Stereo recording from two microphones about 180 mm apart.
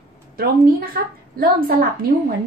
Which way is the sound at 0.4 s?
55° right (ahead or behind).